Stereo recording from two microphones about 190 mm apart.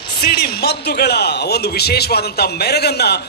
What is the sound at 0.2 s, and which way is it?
Speech, 55° left (ahead or behind).